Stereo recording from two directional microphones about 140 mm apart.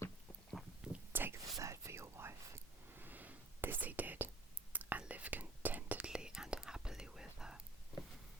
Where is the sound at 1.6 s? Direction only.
20° right (ahead or behind); by 7.6 s 5° right (ahead or behind).